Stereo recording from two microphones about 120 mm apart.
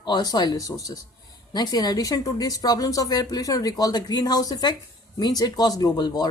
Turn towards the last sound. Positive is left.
turn(degrees=35)  # may be behind; listen again after turning